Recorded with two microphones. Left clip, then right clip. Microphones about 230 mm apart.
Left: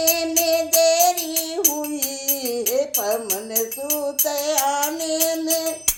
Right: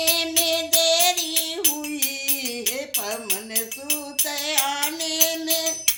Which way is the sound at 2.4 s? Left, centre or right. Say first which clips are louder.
Left 6 dB; right.